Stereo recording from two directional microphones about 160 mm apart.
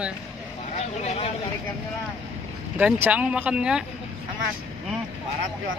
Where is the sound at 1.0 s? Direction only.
40° left (ahead or behind).